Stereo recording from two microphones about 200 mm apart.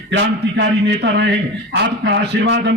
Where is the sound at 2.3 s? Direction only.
65° right (ahead or behind).